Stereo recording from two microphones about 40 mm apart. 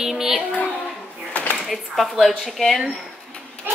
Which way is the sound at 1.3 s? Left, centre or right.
Left.